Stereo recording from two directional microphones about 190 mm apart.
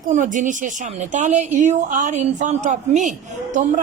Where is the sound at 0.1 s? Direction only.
40° right (ahead or behind).